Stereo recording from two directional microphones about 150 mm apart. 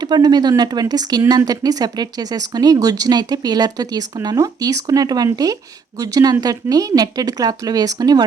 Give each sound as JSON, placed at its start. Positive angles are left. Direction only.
{"t": 0.0, "sound": "speech", "side_deg": -25}